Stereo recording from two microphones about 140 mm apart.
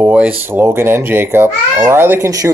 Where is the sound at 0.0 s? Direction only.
10° right (ahead or behind).